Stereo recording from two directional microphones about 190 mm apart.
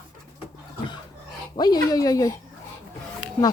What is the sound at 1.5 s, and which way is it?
Speech, 20° left (ahead or behind).